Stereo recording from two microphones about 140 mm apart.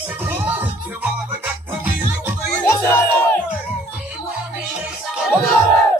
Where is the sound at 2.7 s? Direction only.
15° left (ahead or behind).